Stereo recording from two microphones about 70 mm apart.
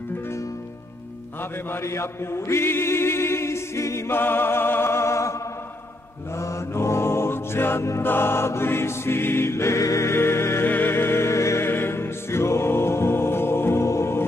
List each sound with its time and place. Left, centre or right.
1.7 s chant: left
4.2 s music: left
6.4 s mantra: left
8.1 s choir: left